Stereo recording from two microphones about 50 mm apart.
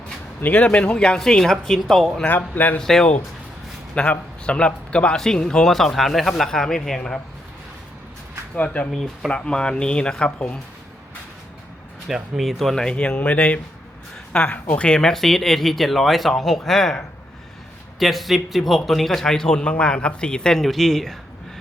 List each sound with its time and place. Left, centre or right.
0.5 s speech: left; by 3.1 s centre
3.9 s a man's voice: left
5.1 s speech: centre
8.5 s speech: left
8.9 s speech: centre
9.3 s speech: centre
12.0 s speech: centre
12.8 s speech: centre
14.8 s speech: centre
15.1 s speech: centre
18.0 s speech: centre